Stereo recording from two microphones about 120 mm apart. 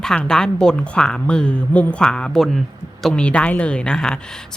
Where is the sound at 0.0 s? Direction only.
5° left (ahead or behind).